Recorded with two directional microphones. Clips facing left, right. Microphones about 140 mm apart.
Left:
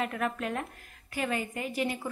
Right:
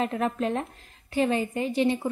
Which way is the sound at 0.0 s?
25° right (ahead or behind).